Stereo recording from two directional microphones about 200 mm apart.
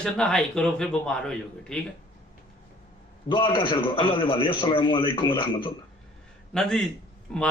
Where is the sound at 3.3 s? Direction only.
25° left (ahead or behind).